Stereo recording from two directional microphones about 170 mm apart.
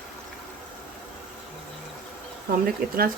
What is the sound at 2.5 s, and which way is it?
Speech, 55° right (ahead or behind).